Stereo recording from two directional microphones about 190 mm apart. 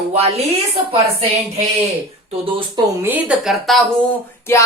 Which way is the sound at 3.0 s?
5° right (ahead or behind).